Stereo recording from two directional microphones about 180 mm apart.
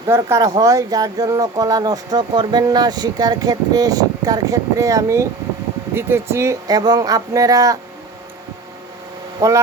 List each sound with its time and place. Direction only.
0.1 s speech: 15° right (ahead or behind)
9.4 s speech: 15° right (ahead or behind)